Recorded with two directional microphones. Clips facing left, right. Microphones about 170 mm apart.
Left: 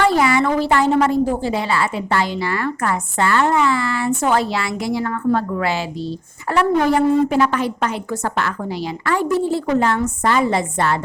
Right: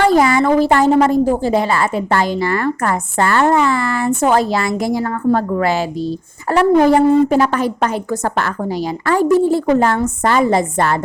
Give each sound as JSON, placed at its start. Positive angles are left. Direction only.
{"t": 0.0, "sound": "a woman's voice", "side_deg": -40}